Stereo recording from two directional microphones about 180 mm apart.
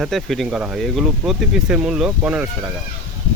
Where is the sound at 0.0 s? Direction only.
Centre (ahead or behind).